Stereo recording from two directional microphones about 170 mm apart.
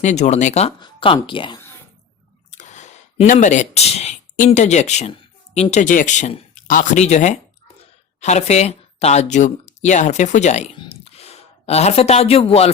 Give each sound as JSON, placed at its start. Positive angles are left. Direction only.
{"t": 0.0, "sound": "speech", "side_deg": 40}
{"t": 0.8, "sound": "speech", "side_deg": 30}
{"t": 2.5, "sound": "speech", "side_deg": 45}